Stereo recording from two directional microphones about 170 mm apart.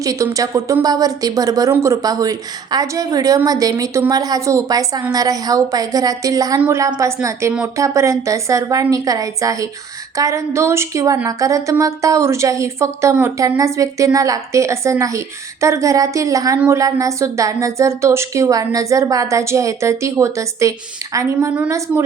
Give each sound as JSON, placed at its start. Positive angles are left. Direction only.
{"t": 0.0, "sound": "a woman's voice", "side_deg": -20}
{"t": 21.3, "sound": "a woman's voice", "side_deg": -10}